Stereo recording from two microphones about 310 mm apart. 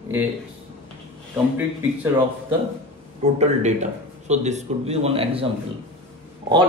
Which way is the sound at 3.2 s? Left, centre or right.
Right.